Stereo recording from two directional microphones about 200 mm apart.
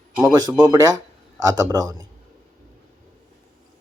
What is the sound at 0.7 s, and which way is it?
A man's voice, 20° right (ahead or behind).